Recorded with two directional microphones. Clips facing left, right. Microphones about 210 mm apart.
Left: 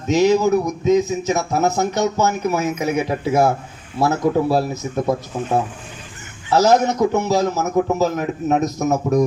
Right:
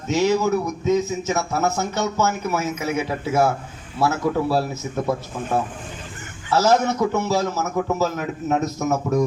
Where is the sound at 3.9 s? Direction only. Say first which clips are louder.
Left 2 dB; 40° left (ahead or behind).